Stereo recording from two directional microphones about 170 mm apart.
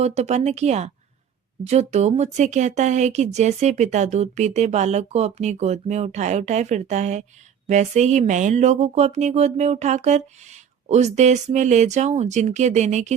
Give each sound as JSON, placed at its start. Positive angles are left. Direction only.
{"t": 0.0, "sound": "speech", "side_deg": -40}